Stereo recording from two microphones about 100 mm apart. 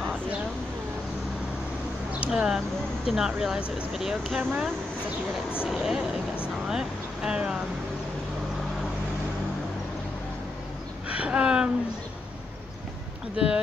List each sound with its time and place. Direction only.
2.1 s speech: 10° right (ahead or behind)
4.4 s speech: 20° right (ahead or behind)
5.7 s speech: 5° right (ahead or behind)
11.1 s a sound: 10° right (ahead or behind)